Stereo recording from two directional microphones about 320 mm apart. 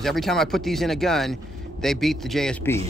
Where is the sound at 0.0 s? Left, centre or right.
Centre.